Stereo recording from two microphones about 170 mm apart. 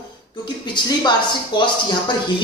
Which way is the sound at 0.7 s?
25° left (ahead or behind).